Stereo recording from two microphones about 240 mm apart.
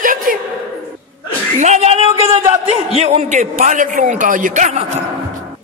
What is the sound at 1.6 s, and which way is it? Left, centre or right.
A man's voice, right.